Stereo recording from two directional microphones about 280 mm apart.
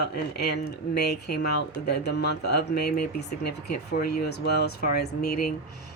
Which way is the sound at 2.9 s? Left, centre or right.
Left.